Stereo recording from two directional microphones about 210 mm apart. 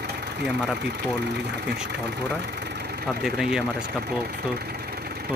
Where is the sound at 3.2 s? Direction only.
Centre (ahead or behind).